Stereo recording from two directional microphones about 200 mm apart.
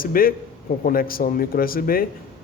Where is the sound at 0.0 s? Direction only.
45° left (ahead or behind).